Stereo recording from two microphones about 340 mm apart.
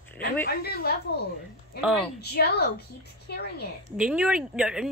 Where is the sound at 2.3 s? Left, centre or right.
Left.